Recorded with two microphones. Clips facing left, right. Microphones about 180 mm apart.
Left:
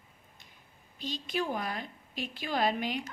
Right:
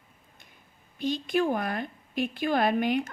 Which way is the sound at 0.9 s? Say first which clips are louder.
Right 8 dB; 55° right (ahead or behind).